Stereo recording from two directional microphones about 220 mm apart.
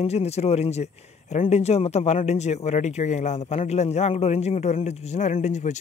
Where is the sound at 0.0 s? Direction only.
30° left (ahead or behind).